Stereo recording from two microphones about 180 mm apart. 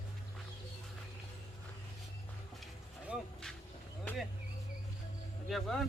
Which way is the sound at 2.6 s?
5° right (ahead or behind).